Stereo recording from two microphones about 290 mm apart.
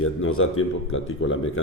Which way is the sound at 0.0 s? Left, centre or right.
Left.